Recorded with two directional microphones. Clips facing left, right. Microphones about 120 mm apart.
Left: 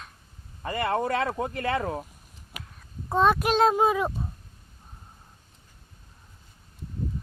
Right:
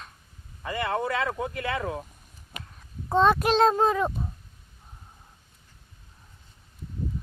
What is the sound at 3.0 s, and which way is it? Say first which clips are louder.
A child's voice: right 1 dB; centre (ahead or behind).